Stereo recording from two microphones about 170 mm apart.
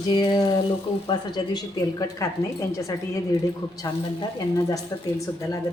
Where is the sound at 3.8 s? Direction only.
20° left (ahead or behind).